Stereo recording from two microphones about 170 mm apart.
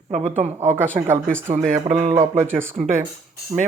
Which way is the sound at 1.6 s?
45° right (ahead or behind).